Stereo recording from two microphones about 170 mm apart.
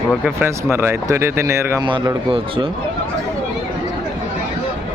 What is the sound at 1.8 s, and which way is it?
Speech, 30° right (ahead or behind).